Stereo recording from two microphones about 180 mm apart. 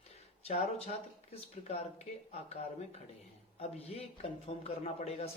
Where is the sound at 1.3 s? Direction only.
35° left (ahead or behind).